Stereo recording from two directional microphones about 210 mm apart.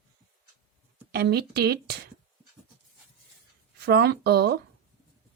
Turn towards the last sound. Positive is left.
turn(degrees=-50)  # may be behind; listen again after turning